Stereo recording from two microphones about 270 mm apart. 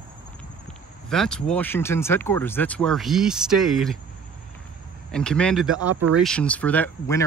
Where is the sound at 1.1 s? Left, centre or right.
Centre.